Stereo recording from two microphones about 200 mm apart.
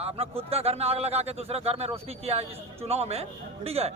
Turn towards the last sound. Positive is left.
turn(degrees=-30)  # may be behind; listen again after turning